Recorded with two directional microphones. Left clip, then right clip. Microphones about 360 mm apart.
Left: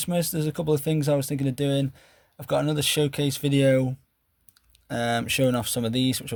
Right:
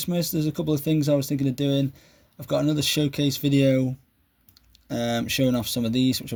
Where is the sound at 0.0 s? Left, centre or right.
Left.